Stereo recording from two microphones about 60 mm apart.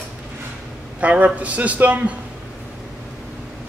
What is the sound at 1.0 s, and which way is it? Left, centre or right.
A man's voice, right.